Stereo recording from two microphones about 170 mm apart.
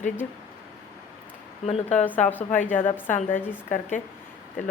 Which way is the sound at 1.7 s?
40° left (ahead or behind).